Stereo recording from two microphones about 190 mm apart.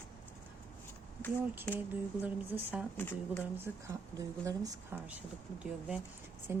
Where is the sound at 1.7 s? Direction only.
10° right (ahead or behind).